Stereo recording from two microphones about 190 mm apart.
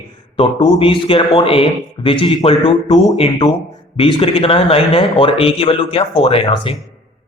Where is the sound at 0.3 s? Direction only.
25° left (ahead or behind).